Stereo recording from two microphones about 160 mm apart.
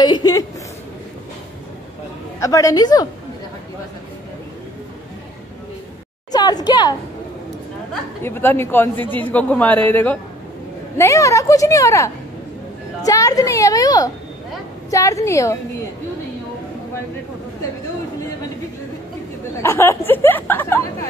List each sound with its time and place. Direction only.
0.0 s speech: 25° left (ahead or behind)
2.4 s speech: 20° left (ahead or behind)
6.3 s speech: 25° left (ahead or behind)
8.2 s a man's voice: 15° left (ahead or behind)
19.6 s a man's voice: 15° left (ahead or behind)